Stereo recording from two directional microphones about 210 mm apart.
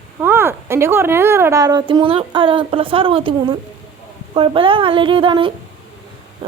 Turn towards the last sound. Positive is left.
turn(degrees=-25)  # may be behind; listen again after turning